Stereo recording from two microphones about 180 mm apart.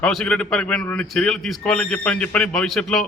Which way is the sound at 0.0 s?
5° left (ahead or behind).